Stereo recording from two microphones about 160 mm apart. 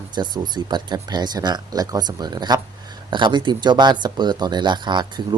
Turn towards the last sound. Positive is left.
turn(degrees=-30)  # may be behind; listen again after turning